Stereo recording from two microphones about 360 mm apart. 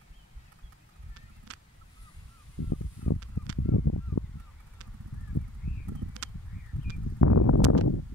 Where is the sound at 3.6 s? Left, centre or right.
Left.